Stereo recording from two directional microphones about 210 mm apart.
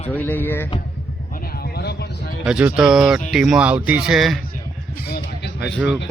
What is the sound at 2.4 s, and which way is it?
Speech, 5° right (ahead or behind).